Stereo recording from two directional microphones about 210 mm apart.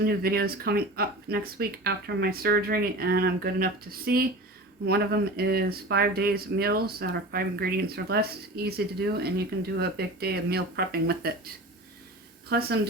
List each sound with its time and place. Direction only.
0.0 s speech: 45° right (ahead or behind)
12.5 s speech: 50° right (ahead or behind)